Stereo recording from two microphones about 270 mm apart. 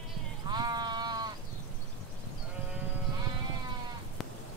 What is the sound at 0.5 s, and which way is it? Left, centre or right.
Sheep, centre.